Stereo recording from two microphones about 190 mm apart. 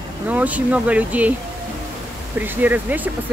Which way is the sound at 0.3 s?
10° right (ahead or behind).